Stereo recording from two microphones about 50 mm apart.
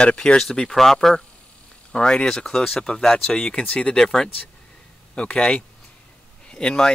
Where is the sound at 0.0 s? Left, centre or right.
Left.